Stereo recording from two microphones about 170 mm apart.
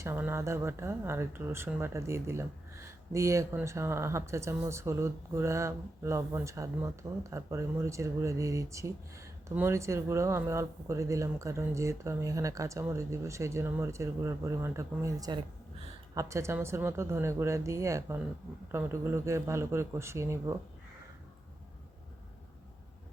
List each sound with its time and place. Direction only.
0.0 s speech: 15° right (ahead or behind)